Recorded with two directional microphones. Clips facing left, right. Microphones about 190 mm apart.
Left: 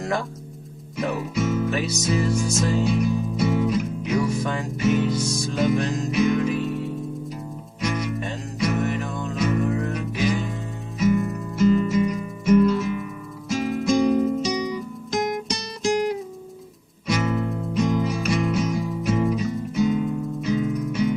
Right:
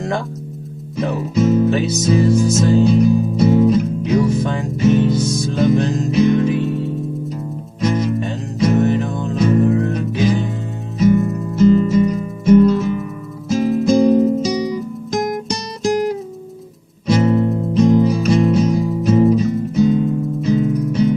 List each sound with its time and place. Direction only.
0.9 s music: 35° right (ahead or behind)